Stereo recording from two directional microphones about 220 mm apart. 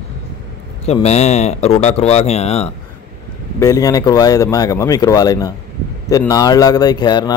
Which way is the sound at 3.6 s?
15° left (ahead or behind).